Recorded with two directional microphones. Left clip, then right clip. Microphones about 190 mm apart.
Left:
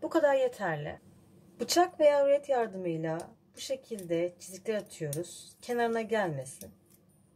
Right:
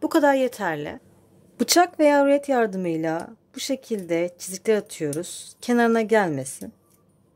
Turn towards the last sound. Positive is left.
turn(degrees=-55)  # may be behind; listen again after turning